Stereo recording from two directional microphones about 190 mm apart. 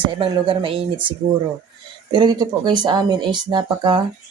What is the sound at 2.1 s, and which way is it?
Speech, 20° right (ahead or behind).